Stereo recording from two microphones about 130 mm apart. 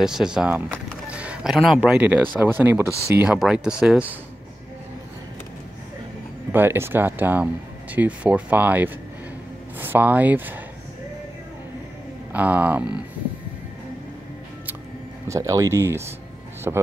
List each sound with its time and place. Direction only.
0.0 s speech: 5° right (ahead or behind)
1.1 s a sound: 10° right (ahead or behind)
2.0 s speech: 10° right (ahead or behind)
3.2 s speech: 5° right (ahead or behind)
6.5 s speech: 15° right (ahead or behind)
12.3 s speech: 10° right (ahead or behind)
15.2 s speech: 25° right (ahead or behind)